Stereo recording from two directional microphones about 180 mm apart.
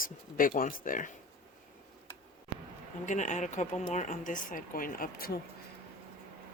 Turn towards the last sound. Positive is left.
turn(degrees=55)  # may be behind; listen again after turning